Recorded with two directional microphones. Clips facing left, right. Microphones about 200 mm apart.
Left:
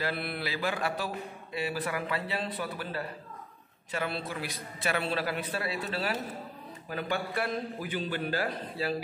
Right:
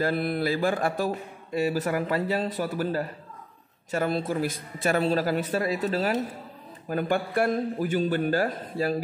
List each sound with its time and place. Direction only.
0.0 s a man's voice: 45° right (ahead or behind)